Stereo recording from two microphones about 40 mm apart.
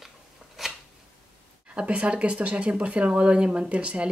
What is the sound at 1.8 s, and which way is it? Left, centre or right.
Speech, right.